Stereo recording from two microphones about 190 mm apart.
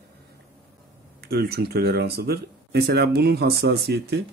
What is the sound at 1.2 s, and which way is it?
Speech, 55° right (ahead or behind).